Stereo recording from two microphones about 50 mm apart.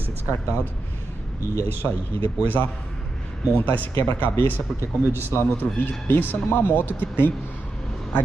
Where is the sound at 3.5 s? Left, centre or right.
Left.